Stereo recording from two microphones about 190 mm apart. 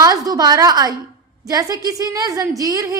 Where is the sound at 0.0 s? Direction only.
20° right (ahead or behind).